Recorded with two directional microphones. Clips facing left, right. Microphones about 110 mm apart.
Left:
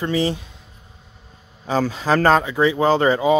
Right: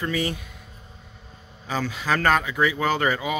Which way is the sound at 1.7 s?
35° left (ahead or behind).